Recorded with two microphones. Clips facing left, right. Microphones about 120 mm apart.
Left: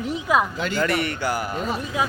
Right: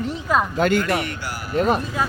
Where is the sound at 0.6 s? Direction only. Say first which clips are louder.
Right 4 dB; 55° right (ahead or behind).